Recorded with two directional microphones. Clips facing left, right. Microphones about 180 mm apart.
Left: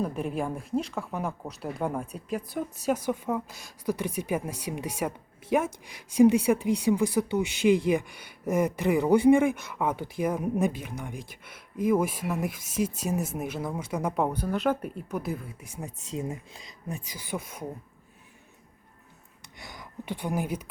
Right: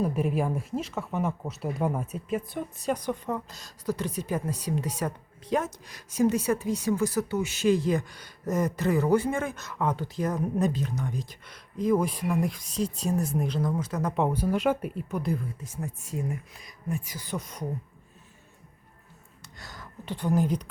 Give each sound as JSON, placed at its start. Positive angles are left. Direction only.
{"t": 0.0, "sound": "speech", "side_deg": -5}
{"t": 14.2, "sound": "speech", "side_deg": -5}
{"t": 19.4, "sound": "speech", "side_deg": 15}